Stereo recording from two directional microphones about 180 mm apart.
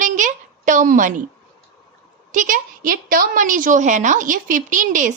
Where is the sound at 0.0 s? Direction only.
45° right (ahead or behind).